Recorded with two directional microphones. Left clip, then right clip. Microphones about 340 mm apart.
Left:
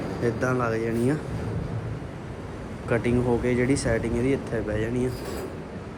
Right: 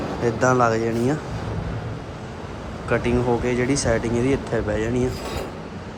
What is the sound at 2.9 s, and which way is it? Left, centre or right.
Speech, centre.